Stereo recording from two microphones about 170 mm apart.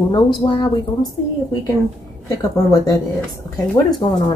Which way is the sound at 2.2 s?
20° left (ahead or behind).